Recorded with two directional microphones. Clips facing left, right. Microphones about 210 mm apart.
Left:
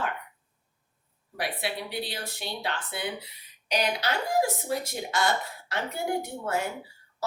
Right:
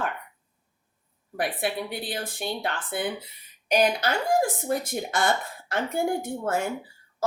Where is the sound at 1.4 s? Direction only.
50° right (ahead or behind).